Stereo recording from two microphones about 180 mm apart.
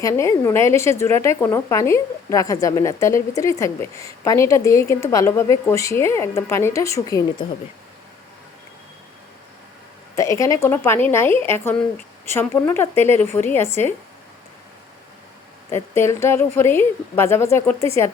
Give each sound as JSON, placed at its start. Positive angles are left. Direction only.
{"t": 0.0, "sound": "a woman's voice", "side_deg": 15}
{"t": 10.2, "sound": "a woman's voice", "side_deg": 15}
{"t": 15.7, "sound": "a woman's voice", "side_deg": 15}